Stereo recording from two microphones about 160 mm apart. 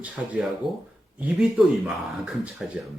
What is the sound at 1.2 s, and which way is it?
Speech, 5° right (ahead or behind).